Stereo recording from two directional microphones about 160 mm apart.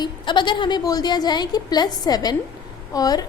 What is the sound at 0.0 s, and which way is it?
A woman's voice, 30° left (ahead or behind).